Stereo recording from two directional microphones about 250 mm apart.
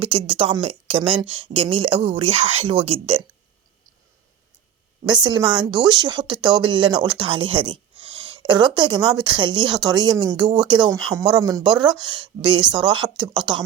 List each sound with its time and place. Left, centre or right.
0.0 s speech: right
5.0 s speech: centre